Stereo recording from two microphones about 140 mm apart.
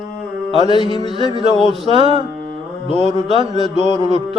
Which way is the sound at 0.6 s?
35° left (ahead or behind).